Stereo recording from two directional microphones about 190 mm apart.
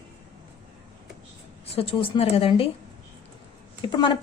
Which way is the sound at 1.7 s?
30° left (ahead or behind).